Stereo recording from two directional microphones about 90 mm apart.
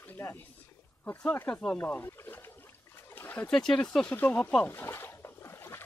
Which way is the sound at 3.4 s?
5° left (ahead or behind).